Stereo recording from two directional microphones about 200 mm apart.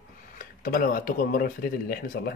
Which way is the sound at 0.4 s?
45° left (ahead or behind).